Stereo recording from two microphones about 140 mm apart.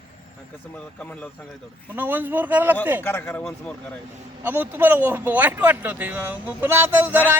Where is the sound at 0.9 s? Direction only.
10° left (ahead or behind).